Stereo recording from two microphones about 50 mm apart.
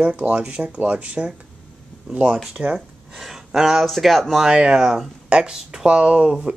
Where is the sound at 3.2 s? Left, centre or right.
Centre.